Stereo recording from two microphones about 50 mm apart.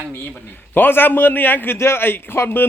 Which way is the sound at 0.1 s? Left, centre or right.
Left.